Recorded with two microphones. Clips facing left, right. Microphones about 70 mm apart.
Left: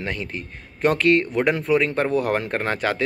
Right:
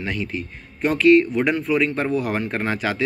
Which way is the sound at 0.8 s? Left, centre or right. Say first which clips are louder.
Right 3 dB; left.